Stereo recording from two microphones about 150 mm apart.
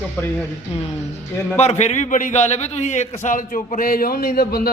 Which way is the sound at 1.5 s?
50° left (ahead or behind).